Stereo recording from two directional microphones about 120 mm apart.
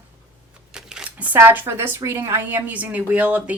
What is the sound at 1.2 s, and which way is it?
Speech, 15° right (ahead or behind).